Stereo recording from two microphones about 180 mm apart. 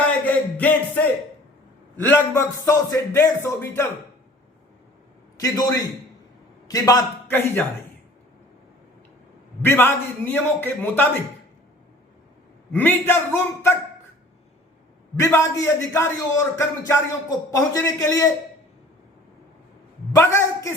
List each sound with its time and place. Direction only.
0.0 s a sound: 10° left (ahead or behind)
2.0 s speech: 10° left (ahead or behind)
5.4 s speech: 20° left (ahead or behind)
9.6 s speech: 10° left (ahead or behind)
12.7 s speech: 10° left (ahead or behind)
15.1 s speech: 15° left (ahead or behind)
20.1 s speech: 15° left (ahead or behind)